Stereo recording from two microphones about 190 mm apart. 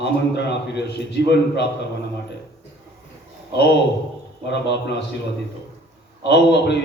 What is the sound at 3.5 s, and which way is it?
A man's voice, 60° left (ahead or behind).